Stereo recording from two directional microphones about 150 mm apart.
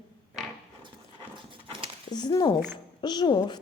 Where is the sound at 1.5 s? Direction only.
35° right (ahead or behind).